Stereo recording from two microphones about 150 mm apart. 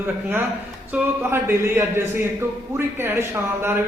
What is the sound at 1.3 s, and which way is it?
A man's voice, 15° right (ahead or behind).